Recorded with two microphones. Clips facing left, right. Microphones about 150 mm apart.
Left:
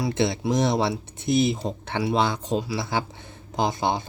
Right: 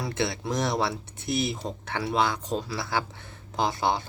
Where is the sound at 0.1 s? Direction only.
20° left (ahead or behind).